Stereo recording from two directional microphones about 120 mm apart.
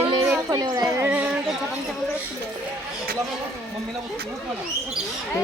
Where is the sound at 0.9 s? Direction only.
15° right (ahead or behind).